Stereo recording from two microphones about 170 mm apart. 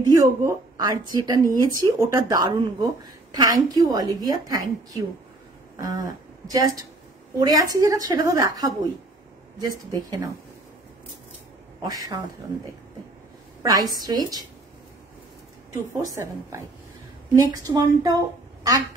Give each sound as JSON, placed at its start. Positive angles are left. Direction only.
{"t": 0.0, "sound": "speech", "side_deg": -20}
{"t": 11.8, "sound": "speech", "side_deg": -20}
{"t": 13.6, "sound": "a woman's voice", "side_deg": -20}
{"t": 15.7, "sound": "speech", "side_deg": -20}